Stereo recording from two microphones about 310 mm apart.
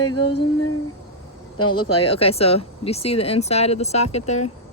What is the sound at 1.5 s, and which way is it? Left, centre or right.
Speech, left.